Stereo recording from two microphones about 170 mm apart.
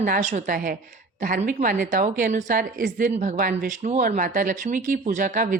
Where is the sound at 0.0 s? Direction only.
50° right (ahead or behind).